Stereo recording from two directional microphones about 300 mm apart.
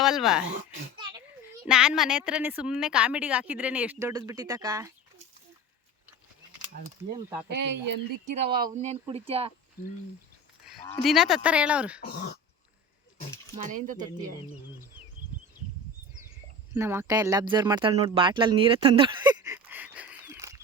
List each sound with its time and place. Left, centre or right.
0.0 s a woman's voice: centre
1.6 s a woman's voice: centre
7.5 s speech: right
8.2 s speech: centre
11.0 s a woman's voice: centre
13.6 s speech: right
16.7 s speech: centre